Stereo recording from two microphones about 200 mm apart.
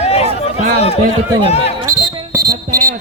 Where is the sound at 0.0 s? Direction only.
30° left (ahead or behind).